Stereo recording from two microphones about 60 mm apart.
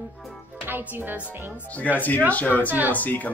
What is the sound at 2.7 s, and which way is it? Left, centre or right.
Speech, right.